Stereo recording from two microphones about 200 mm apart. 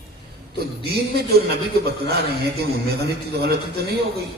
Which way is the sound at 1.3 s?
55° right (ahead or behind).